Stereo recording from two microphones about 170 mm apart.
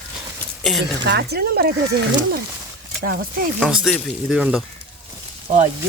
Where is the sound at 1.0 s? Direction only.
75° right (ahead or behind).